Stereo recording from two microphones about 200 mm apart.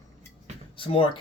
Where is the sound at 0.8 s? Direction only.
25° left (ahead or behind).